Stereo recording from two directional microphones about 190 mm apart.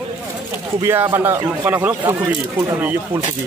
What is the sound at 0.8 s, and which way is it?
Speech, 10° right (ahead or behind).